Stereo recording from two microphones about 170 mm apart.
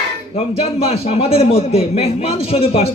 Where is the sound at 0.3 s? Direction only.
35° left (ahead or behind).